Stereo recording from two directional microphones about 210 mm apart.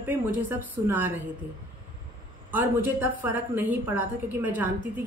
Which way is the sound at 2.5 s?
10° right (ahead or behind).